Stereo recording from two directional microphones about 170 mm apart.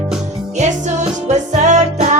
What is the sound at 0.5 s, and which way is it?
Music, 45° right (ahead or behind).